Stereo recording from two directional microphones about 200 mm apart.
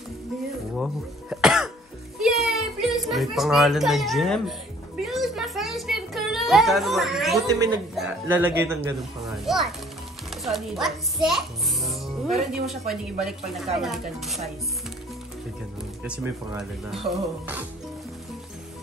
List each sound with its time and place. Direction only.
0.7 s cough: centre (ahead or behind)
2.1 s music: centre (ahead or behind)
5.0 s a sound: centre (ahead or behind)
7.4 s speech: 20° right (ahead or behind)
7.9 s a man's voice: 5° right (ahead or behind)
9.2 s a child's voice: centre (ahead or behind)
16.0 s speech: 5° right (ahead or behind)